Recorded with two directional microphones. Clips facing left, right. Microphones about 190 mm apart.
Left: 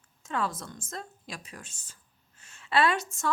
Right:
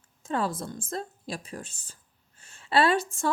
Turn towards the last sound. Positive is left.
turn(degrees=-30)  # may be behind; listen again after turning